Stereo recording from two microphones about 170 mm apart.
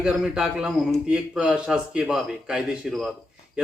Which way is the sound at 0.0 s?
5° right (ahead or behind).